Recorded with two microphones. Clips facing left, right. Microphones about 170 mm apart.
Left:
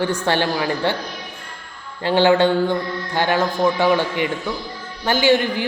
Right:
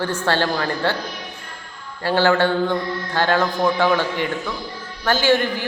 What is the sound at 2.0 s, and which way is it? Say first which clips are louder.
A man's voice: left 2 dB; 15° left (ahead or behind).